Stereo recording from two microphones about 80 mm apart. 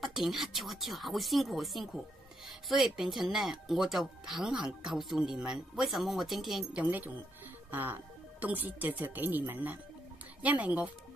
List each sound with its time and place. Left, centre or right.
0.0 s speech: centre
6.7 s speech: centre